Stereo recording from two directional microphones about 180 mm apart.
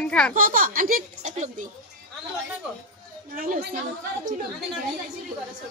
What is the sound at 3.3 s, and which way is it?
Speech, 50° right (ahead or behind).